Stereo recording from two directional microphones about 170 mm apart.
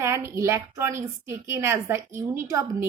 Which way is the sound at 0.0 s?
15° right (ahead or behind).